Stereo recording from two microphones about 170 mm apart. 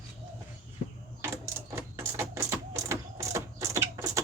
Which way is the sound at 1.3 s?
15° right (ahead or behind).